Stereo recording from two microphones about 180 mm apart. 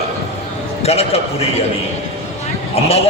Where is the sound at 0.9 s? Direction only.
35° left (ahead or behind).